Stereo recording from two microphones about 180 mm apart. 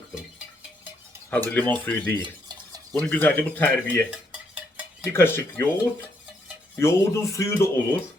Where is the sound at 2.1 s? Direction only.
25° right (ahead or behind).